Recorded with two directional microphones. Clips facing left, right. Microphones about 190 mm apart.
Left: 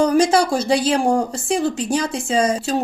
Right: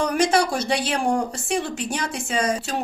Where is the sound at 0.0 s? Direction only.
30° left (ahead or behind).